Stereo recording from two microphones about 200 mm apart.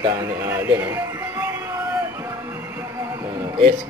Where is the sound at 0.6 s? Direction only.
10° right (ahead or behind).